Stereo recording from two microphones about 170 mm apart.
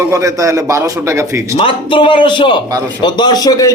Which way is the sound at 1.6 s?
30° left (ahead or behind).